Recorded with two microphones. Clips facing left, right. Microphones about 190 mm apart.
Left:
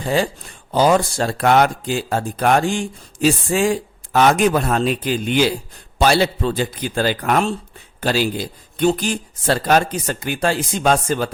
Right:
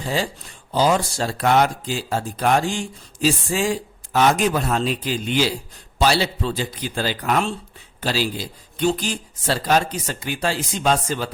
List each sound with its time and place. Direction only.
0.0 s speech: 55° left (ahead or behind)